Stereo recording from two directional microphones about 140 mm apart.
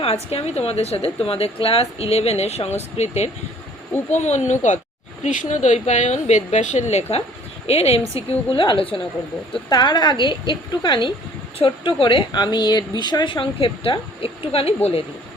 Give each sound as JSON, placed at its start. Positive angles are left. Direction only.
{"t": 0.0, "sound": "a woman's voice", "side_deg": 45}